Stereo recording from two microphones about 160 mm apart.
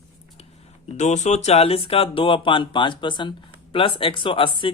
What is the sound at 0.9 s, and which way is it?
Speech, 45° left (ahead or behind).